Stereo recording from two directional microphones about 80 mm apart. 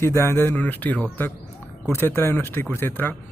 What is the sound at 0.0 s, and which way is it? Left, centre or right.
Speech, left.